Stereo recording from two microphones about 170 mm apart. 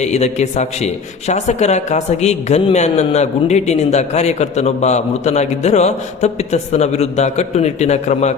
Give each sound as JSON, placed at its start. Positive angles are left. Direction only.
{"t": 0.0, "sound": "a man's voice", "side_deg": 40}